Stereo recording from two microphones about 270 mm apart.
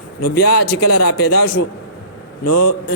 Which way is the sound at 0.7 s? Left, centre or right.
Left.